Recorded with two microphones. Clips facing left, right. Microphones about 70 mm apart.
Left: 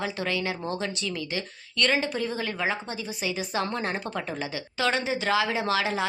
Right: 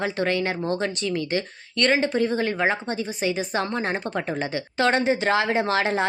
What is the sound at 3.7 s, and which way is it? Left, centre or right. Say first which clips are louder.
A woman's voice: right 4 dB; right.